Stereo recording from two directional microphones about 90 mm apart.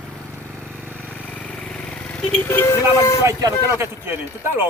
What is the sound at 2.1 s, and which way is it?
Speech, 20° left (ahead or behind).